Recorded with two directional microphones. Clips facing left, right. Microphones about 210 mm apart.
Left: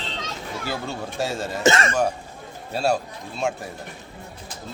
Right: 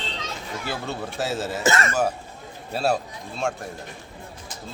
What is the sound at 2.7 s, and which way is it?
Speech, centre (ahead or behind).